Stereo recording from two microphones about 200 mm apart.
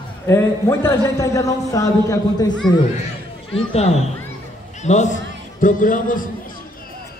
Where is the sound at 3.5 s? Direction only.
30° left (ahead or behind).